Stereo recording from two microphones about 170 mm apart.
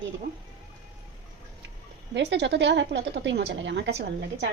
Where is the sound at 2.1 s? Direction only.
90° right.